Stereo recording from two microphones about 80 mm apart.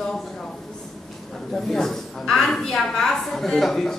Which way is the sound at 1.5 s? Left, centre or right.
Centre.